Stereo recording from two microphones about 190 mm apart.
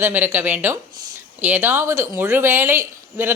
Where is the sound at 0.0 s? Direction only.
10° right (ahead or behind).